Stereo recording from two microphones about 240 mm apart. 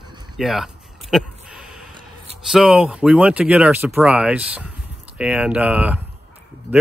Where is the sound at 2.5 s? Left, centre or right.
Centre.